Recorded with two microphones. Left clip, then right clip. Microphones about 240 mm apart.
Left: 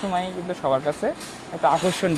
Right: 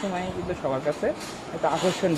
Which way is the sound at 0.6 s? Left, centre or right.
Left.